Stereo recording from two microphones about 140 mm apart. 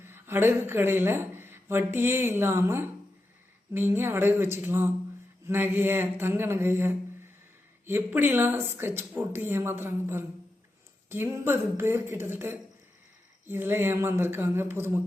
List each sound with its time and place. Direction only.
0.0 s speech: 15° right (ahead or behind)